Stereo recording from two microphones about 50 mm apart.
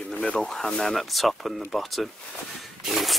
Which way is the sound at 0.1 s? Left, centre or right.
Centre.